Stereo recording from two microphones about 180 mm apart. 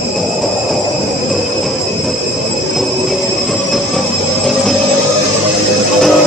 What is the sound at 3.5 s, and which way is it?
Train, centre (ahead or behind).